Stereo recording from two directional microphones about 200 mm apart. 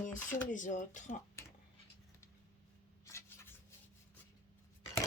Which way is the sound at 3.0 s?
15° left (ahead or behind).